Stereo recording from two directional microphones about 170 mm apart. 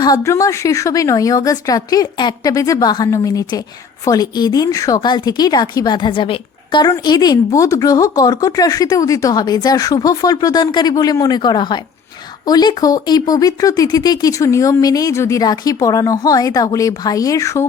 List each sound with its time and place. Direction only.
0.0 s a woman's voice: 20° left (ahead or behind)